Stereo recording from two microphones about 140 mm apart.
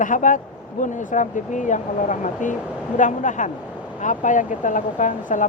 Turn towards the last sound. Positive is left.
turn(degrees=65)  # may be behind; listen again after turning